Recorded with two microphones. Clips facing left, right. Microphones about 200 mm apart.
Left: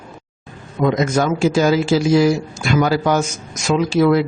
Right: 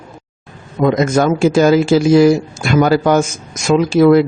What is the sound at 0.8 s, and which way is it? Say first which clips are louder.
A man's voice: right 4 dB; 50° right (ahead or behind).